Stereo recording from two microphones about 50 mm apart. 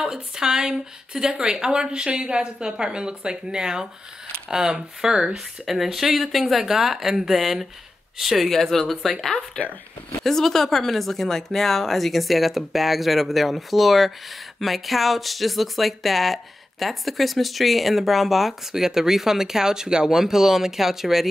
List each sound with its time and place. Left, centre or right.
0.0 s speech: centre
8.5 s speech: centre